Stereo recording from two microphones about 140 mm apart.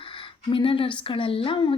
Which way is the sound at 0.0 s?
40° left (ahead or behind).